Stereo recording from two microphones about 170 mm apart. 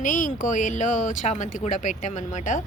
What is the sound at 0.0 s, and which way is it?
A woman's voice, 50° left (ahead or behind).